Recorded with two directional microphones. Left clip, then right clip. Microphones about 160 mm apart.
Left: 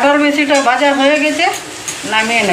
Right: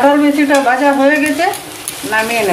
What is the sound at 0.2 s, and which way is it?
Speech, 50° right (ahead or behind).